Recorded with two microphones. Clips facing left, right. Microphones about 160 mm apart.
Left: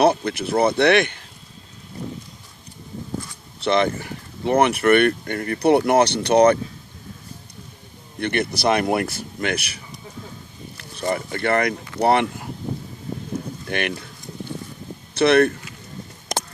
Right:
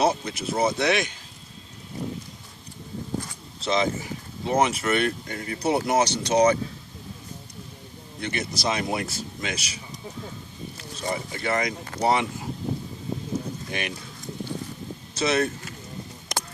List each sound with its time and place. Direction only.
0.0 s speech: 60° left (ahead or behind)
3.6 s speech: 60° left (ahead or behind)
8.2 s speech: 60° left (ahead or behind)
13.7 s speech: 65° left (ahead or behind)
15.1 s speech: 60° left (ahead or behind)